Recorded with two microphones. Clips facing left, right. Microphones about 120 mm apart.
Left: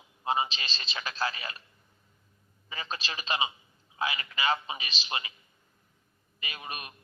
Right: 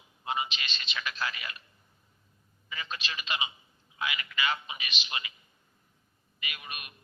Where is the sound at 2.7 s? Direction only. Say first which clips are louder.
Left 1 dB; 35° left (ahead or behind).